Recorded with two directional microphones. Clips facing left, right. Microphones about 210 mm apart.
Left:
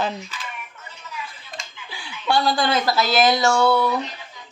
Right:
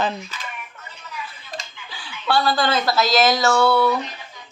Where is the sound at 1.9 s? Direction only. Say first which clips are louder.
Even; 10° left (ahead or behind).